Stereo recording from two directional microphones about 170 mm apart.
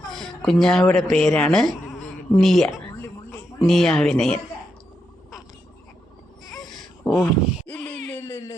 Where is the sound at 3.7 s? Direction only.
Centre (ahead or behind).